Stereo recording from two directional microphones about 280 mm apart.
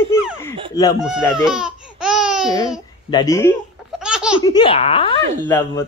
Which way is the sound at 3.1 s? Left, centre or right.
Centre.